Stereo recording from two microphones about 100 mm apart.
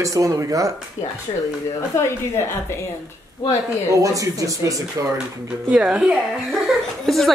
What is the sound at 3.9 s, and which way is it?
Speech, 35° right (ahead or behind).